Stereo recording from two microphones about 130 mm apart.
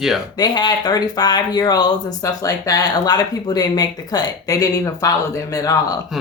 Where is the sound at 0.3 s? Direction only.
35° left (ahead or behind).